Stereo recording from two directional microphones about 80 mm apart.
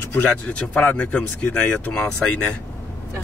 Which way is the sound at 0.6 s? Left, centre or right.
Centre.